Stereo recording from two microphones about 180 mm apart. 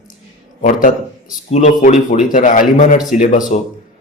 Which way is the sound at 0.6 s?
45° left (ahead or behind).